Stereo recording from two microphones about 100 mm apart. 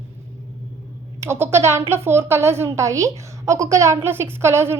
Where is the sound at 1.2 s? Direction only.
25° right (ahead or behind).